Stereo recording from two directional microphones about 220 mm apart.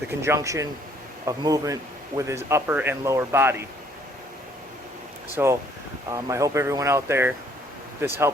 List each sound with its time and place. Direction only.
0.2 s a man's voice: 15° right (ahead or behind)
5.4 s a man's voice: 10° right (ahead or behind)